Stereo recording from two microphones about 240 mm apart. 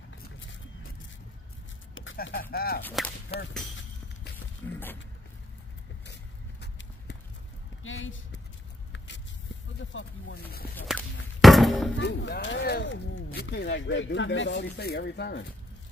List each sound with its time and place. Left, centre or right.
2.1 s speech: left
2.5 s whip: left
2.8 s whip: centre
3.3 s speech: left
4.6 s whip: centre
6.6 s horse: left
7.8 s speech: left
8.9 s a sound: left
10.7 s whip: centre
11.4 s a sound: centre
12.0 s speech: left